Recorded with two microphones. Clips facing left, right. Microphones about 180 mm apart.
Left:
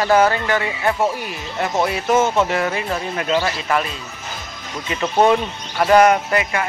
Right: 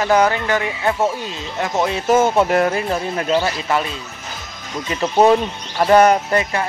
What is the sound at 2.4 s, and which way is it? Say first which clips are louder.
Speech: right 3 dB; 45° right (ahead or behind).